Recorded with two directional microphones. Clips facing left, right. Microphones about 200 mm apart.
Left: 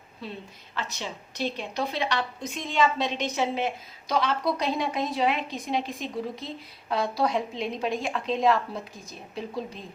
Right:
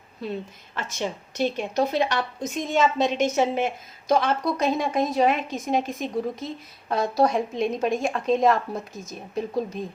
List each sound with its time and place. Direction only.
0.8 s a woman's voice: 50° right (ahead or behind)